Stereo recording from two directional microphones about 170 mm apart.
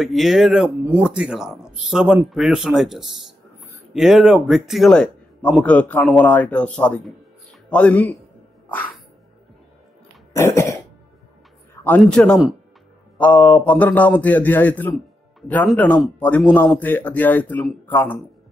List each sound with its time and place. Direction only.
0.0 s speech: centre (ahead or behind)
8.6 s music: 10° left (ahead or behind)
10.3 s speech: 15° left (ahead or behind)
11.8 s speech: 5° left (ahead or behind)